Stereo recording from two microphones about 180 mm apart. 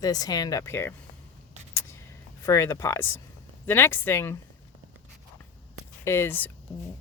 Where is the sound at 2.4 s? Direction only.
15° left (ahead or behind).